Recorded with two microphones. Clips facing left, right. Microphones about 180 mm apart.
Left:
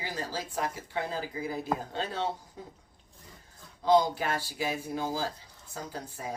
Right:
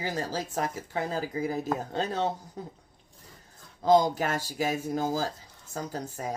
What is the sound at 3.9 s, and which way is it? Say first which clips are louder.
A woman's voice: right 2 dB; 45° right (ahead or behind).